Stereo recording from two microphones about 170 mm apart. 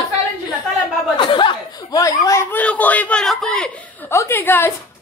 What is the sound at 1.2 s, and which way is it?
Chuckle, 30° left (ahead or behind).